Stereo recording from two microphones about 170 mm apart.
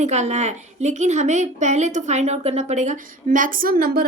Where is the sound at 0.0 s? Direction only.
40° right (ahead or behind).